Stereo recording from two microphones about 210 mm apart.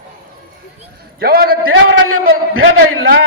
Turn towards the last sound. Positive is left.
turn(degrees=-85)